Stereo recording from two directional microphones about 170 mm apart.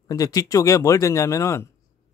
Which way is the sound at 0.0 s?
20° left (ahead or behind).